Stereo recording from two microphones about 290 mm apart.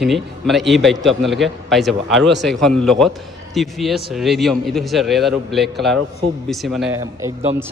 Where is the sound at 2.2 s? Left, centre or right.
Right.